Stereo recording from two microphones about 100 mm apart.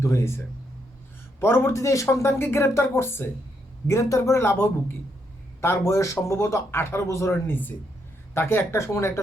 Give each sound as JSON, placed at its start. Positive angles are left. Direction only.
{"t": 0.0, "sound": "a man's voice", "side_deg": 25}